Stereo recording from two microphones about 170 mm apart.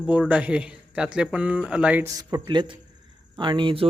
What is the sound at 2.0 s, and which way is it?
Speech, 20° right (ahead or behind).